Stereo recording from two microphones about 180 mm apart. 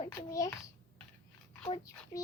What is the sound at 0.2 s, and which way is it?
Speech, 20° left (ahead or behind).